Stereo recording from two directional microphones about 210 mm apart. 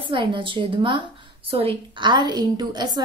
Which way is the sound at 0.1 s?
25° right (ahead or behind).